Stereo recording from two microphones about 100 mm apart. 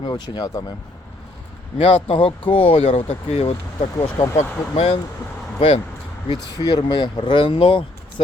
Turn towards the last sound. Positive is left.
turn(degrees=65)  # may be behind; listen again after turning